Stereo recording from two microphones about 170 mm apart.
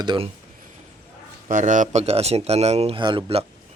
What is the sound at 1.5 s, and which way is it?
Speech, 50° right (ahead or behind).